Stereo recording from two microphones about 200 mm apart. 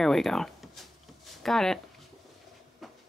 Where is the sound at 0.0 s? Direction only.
Centre (ahead or behind).